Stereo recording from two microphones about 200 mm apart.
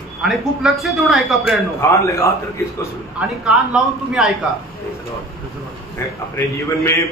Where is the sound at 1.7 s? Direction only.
15° left (ahead or behind).